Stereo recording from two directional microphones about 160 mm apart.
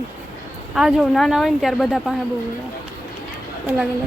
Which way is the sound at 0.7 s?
Centre (ahead or behind).